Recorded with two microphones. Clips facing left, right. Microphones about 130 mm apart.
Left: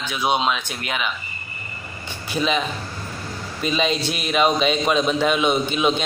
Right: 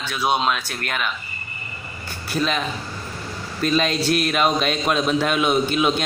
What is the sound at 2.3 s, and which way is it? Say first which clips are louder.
A man's voice: left 1 dB; centre (ahead or behind).